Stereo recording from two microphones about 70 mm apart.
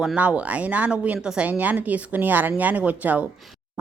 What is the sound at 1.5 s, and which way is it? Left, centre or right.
Speech, right.